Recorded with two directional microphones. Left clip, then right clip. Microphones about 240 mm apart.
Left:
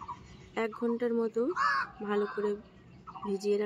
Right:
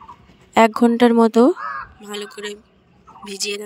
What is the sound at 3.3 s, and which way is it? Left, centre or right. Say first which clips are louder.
Speech: right 5 dB; right.